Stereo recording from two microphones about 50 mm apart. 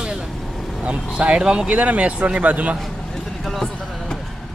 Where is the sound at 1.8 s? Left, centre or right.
Right.